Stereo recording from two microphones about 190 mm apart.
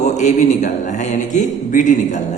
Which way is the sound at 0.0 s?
40° left (ahead or behind).